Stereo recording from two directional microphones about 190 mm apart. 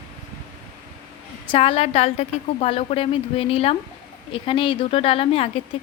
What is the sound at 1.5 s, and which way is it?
A woman's voice, 30° left (ahead or behind).